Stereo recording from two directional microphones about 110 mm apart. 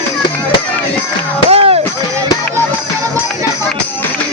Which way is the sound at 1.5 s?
65° right (ahead or behind).